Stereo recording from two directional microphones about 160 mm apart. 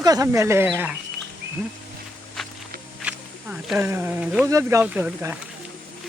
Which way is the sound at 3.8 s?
15° right (ahead or behind).